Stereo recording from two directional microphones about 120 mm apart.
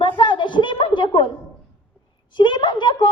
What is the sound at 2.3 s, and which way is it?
Child singing, 40° left (ahead or behind).